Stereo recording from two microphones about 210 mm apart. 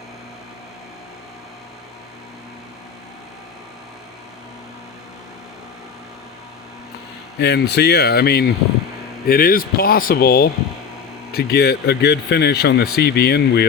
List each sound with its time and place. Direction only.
7.3 s speech: 50° left (ahead or behind)